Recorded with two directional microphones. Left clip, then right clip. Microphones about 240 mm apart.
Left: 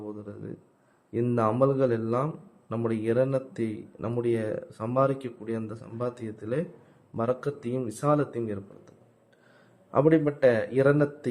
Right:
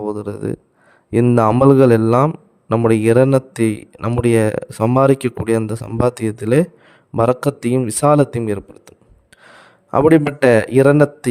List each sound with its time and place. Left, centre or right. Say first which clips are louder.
0.0 s a man's voice: right 16 dB; right